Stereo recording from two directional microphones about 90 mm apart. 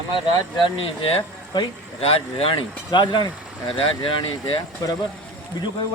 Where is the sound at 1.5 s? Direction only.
90° left; by 4.5 s 70° left (ahead or behind).